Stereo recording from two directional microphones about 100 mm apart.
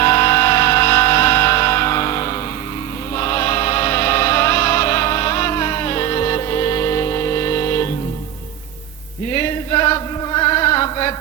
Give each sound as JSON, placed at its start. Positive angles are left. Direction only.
{"t": 0.0, "sound": "music", "side_deg": 30}
{"t": 3.2, "sound": "choir", "side_deg": 30}
{"t": 9.3, "sound": "chant", "side_deg": 30}